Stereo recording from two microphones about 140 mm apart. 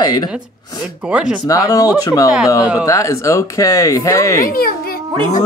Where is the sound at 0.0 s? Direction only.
30° left (ahead or behind).